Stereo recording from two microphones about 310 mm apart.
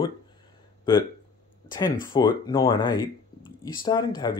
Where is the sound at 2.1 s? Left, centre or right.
Centre.